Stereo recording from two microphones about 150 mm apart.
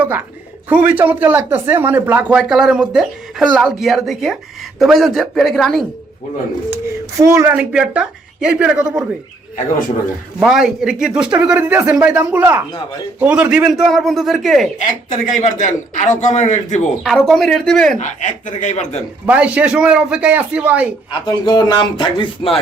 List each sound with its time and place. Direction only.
0.7 s a woman's voice: 10° right (ahead or behind)
7.2 s a woman's voice: 20° right (ahead or behind)
10.4 s a woman's voice: 5° right (ahead or behind)
14.8 s a man's voice: 55° left (ahead or behind)
17.0 s speech: centre (ahead or behind)
18.0 s a man's voice: 55° left (ahead or behind)
19.2 s a woman's voice: 10° right (ahead or behind)
21.1 s speech: 30° left (ahead or behind)